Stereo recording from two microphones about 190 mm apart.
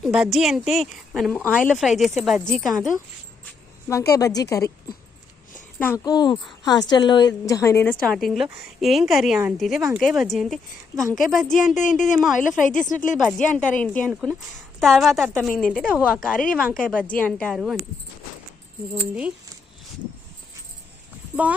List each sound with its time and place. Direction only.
0.0 s speech: 5° right (ahead or behind)
3.8 s a woman's voice: 15° left (ahead or behind)
5.8 s a woman's voice: 10° left (ahead or behind)
6.1 s a woman's voice: 20° left (ahead or behind)
8.0 s speech: centre (ahead or behind)